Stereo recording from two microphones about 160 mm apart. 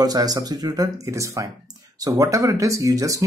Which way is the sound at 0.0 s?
25° right (ahead or behind).